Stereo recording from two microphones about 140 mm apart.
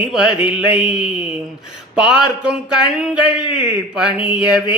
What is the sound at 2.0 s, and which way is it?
Speech, 5° right (ahead or behind).